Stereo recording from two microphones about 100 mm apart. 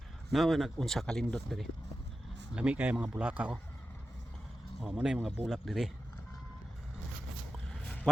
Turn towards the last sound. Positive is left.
turn(degrees=10)  # may be behind; listen again after turning